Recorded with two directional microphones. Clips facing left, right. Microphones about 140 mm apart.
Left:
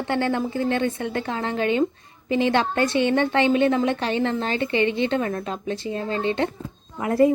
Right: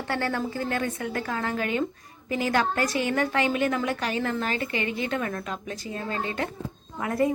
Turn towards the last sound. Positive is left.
turn(degrees=30)  # may be behind; listen again after turning